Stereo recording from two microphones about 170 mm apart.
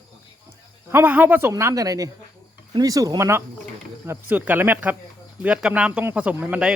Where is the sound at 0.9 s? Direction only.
10° right (ahead or behind).